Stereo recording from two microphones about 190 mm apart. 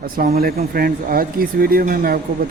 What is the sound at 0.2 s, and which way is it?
Speech, 50° right (ahead or behind).